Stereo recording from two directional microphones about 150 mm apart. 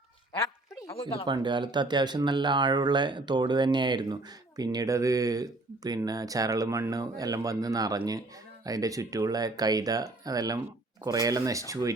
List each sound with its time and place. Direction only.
1.2 s speech: 30° right (ahead or behind)